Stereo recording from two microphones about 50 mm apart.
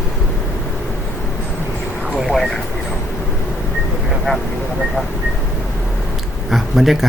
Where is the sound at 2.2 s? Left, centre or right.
Centre.